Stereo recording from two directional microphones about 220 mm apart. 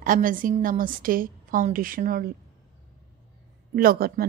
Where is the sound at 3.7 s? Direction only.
40° right (ahead or behind).